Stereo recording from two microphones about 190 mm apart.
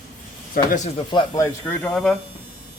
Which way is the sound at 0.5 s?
50° left (ahead or behind).